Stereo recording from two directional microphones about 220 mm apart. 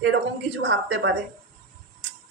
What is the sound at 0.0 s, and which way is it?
A woman's voice, 55° right (ahead or behind).